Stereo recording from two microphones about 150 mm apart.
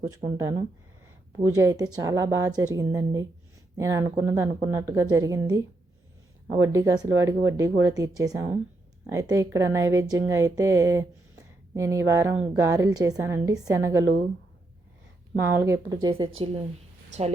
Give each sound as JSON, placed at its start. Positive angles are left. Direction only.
{"t": 0.3, "sound": "speech", "side_deg": -25}
{"t": 15.4, "sound": "speech", "side_deg": -15}